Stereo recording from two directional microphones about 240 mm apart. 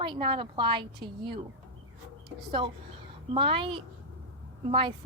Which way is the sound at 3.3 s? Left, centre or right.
Right.